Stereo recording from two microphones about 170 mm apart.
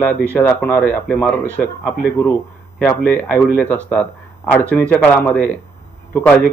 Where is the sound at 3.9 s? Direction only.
5° left (ahead or behind).